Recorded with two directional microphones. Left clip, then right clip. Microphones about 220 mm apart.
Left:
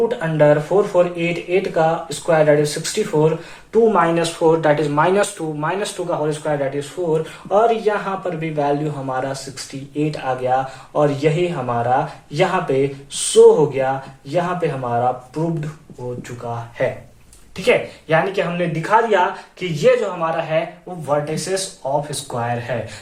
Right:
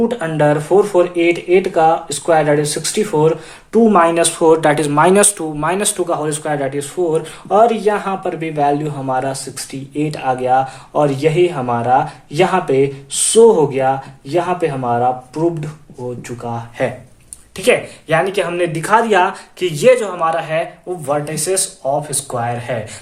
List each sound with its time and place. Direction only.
0.1 s speech: 50° right (ahead or behind)
16.4 s speech: 50° right (ahead or behind)